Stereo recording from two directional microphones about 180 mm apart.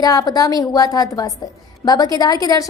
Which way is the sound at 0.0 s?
20° left (ahead or behind).